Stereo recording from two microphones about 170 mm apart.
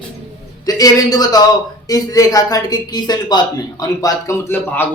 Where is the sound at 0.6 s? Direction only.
20° left (ahead or behind).